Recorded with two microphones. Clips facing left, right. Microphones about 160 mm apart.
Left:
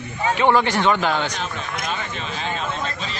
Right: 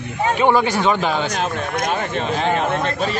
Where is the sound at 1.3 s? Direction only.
55° right (ahead or behind).